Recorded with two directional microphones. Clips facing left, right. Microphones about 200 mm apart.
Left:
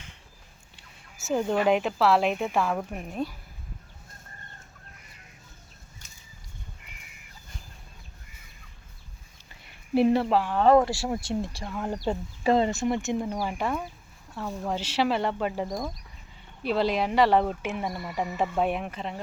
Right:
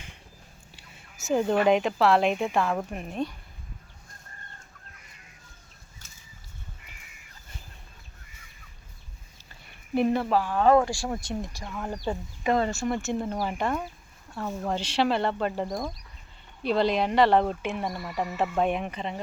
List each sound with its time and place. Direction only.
1.3 s speech: 5° right (ahead or behind)
9.9 s speech: 30° left (ahead or behind)
10.8 s speech: 5° left (ahead or behind)
11.1 s speech: 30° left (ahead or behind)
11.7 s speech: 15° left (ahead or behind)
12.4 s speech: 30° left (ahead or behind)
12.6 s speech: 20° left (ahead or behind); by 19.2 s centre (ahead or behind)